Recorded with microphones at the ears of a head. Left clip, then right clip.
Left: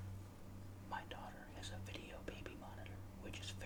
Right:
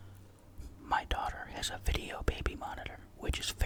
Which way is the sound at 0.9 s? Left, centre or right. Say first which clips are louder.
Right 16 dB; right.